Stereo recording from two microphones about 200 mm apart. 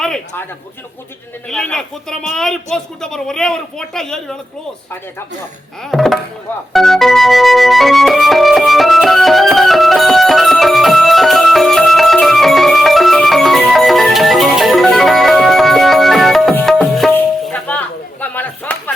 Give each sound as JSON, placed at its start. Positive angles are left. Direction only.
{"t": 0.0, "sound": "a sound", "side_deg": 5}
{"t": 1.5, "sound": "speech", "side_deg": 5}
{"t": 5.8, "sound": "speech", "side_deg": 0}
{"t": 6.7, "sound": "music", "side_deg": 0}